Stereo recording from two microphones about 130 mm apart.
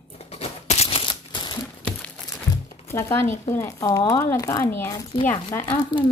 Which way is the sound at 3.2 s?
65° left (ahead or behind).